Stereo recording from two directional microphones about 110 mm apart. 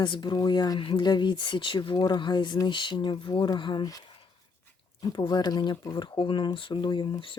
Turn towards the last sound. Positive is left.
turn(degrees=40)  # may be behind; listen again after turning